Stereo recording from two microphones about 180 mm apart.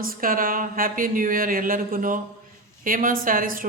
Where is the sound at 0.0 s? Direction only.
55° right (ahead or behind).